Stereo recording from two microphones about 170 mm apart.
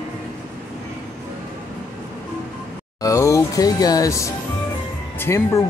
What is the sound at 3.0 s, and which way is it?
Speech, 20° left (ahead or behind).